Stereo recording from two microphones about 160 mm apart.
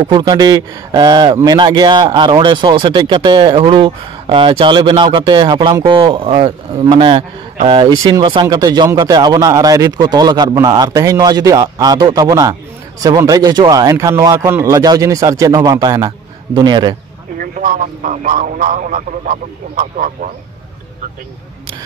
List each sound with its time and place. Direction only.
0.0 s speech: 25° right (ahead or behind)
17.4 s a man's voice: 55° right (ahead or behind)